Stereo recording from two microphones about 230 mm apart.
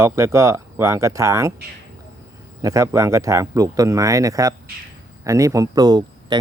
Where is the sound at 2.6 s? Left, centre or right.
Centre.